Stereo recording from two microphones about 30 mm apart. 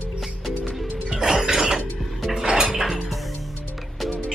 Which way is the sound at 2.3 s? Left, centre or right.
Centre.